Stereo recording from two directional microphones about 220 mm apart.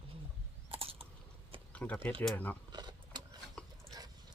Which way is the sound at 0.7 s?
25° right (ahead or behind).